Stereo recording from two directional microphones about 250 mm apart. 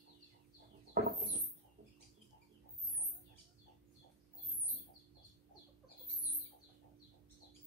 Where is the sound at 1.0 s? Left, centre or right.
Right.